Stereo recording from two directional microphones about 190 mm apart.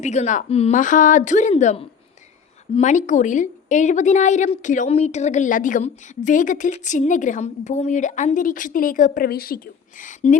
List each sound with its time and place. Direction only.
0.0 s a woman's voice: 35° left (ahead or behind); by 9.6 s 50° left (ahead or behind)
10.0 s a woman's voice: 40° left (ahead or behind)